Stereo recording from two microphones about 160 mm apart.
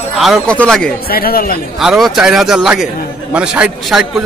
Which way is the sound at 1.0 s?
70° left (ahead or behind).